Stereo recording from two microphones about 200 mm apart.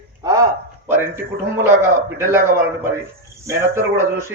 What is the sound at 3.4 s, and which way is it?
Speech, 10° right (ahead or behind).